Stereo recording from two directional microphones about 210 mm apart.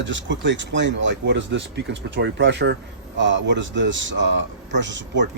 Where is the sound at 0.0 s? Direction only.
60° right (ahead or behind).